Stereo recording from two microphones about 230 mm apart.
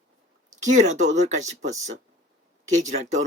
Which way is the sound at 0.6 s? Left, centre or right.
Right.